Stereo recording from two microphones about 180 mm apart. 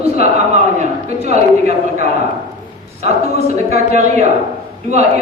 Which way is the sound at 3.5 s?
40° right (ahead or behind).